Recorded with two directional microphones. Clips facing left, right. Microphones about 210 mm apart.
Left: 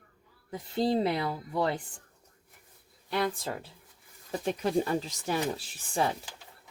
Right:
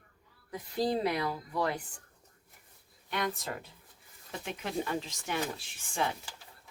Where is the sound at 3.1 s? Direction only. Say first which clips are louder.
Left 4 dB; 30° left (ahead or behind).